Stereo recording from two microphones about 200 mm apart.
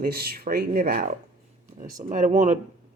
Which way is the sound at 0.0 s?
50° right (ahead or behind).